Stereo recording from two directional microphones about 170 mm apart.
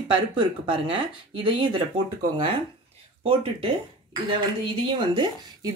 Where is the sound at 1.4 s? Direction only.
30° right (ahead or behind).